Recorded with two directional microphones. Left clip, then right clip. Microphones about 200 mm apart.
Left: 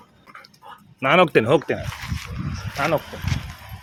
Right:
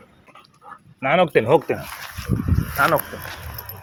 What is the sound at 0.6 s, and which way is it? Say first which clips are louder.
Dog: right 3 dB; 35° left (ahead or behind).